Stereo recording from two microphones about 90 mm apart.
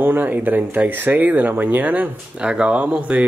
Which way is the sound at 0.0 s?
20° right (ahead or behind).